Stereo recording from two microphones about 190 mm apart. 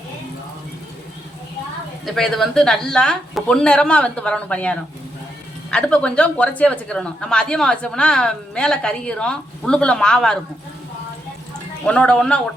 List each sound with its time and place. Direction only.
2.0 s speech: centre (ahead or behind)
11.9 s speech: 5° left (ahead or behind)